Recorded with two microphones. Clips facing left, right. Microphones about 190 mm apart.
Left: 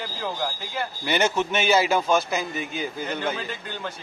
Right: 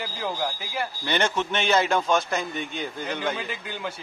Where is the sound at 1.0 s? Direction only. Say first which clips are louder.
Left 3 dB; 10° left (ahead or behind).